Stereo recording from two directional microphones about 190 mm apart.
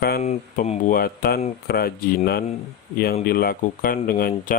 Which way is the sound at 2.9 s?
50° left (ahead or behind).